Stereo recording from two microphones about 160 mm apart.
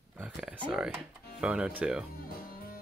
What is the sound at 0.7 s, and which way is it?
Speech, 5° right (ahead or behind).